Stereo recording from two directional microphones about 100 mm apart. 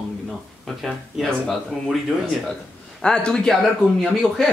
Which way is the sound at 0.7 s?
Centre (ahead or behind).